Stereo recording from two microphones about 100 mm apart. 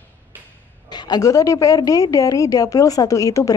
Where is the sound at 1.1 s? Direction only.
35° left (ahead or behind).